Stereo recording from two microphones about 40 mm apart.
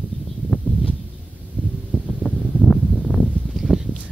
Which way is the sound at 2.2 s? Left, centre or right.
Left.